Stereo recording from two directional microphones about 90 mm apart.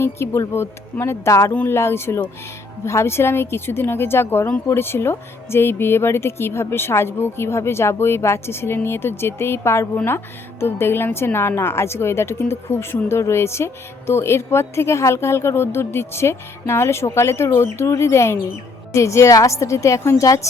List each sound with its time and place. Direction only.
0.0 s a woman's voice: 30° left (ahead or behind)